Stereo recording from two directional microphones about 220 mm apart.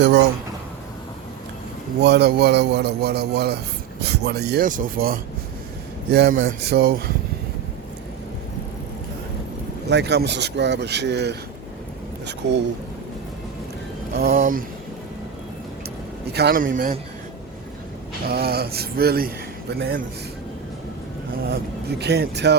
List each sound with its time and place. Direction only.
2.0 s a man's voice: 50° right (ahead or behind)
9.9 s a man's voice: 50° right (ahead or behind)
14.2 s a man's voice: 40° right (ahead or behind)
16.3 s a man's voice: 45° right (ahead or behind)
18.3 s a man's voice: 45° right (ahead or behind)
21.4 s a man's voice: 45° right (ahead or behind)